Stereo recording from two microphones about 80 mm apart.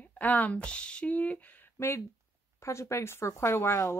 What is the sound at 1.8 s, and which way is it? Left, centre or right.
Speech, left.